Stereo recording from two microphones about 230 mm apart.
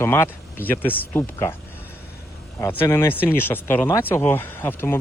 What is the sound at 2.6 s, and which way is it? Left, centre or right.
Speech, centre.